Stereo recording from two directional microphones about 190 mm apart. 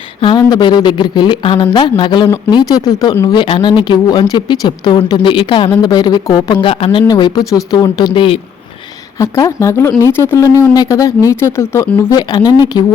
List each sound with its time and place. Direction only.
0.2 s speech: 25° left (ahead or behind)
9.1 s speech: 15° left (ahead or behind)